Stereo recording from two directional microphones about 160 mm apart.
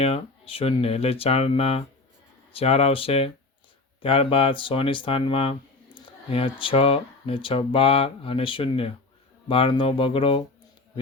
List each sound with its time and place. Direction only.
0.0 s speech: 35° left (ahead or behind)